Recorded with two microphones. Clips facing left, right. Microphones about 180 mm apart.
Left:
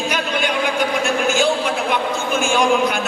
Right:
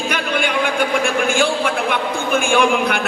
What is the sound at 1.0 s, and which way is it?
A man's voice, 55° right (ahead or behind).